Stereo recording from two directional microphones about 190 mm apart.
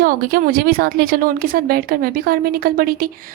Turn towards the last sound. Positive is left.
turn(degrees=-50)  # may be behind; listen again after turning